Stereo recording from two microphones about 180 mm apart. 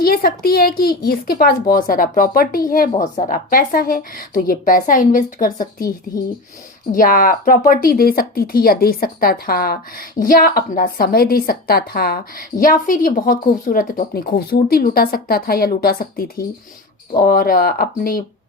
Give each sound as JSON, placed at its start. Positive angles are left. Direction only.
{"t": 0.0, "sound": "a woman's voice", "side_deg": 55}
{"t": 6.9, "sound": "a woman's voice", "side_deg": 50}